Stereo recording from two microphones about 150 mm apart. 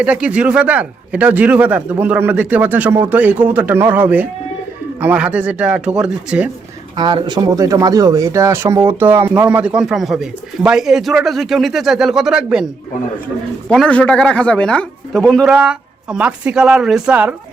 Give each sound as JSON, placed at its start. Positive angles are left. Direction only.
{"t": 0.0, "sound": "speech", "side_deg": -10}
{"t": 6.9, "sound": "speech", "side_deg": -30}
{"t": 13.7, "sound": "speech", "side_deg": 5}